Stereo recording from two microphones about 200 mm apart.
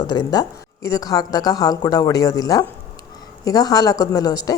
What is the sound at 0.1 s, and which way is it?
Speech, 20° left (ahead or behind).